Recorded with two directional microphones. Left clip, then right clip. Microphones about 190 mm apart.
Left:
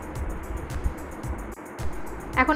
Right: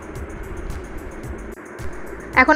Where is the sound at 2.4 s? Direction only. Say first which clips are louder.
Right 8 dB; 30° right (ahead or behind).